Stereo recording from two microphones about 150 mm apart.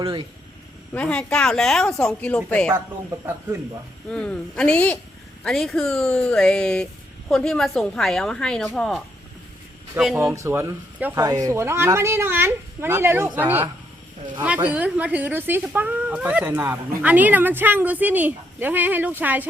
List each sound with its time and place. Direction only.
0.0 s speech: 35° right (ahead or behind)
0.9 s a woman's voice: 5° left (ahead or behind)
4.1 s a woman's voice: 5° left (ahead or behind)
10.2 s speech: 20° right (ahead or behind)